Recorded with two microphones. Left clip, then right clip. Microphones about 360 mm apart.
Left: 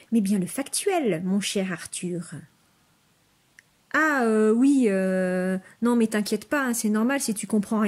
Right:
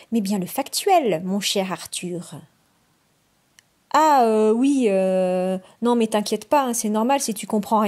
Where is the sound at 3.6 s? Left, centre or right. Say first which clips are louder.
Right 6 dB; centre.